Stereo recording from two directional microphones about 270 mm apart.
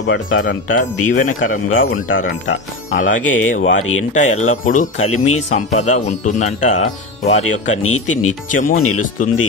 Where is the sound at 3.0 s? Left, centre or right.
Left.